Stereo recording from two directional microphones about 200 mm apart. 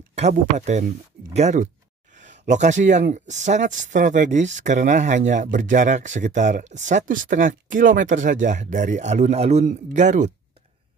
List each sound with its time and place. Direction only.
0.1 s speech: 35° right (ahead or behind)